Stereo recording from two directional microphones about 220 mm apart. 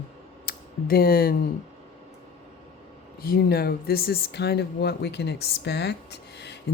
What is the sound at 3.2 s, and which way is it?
Speech, 45° left (ahead or behind).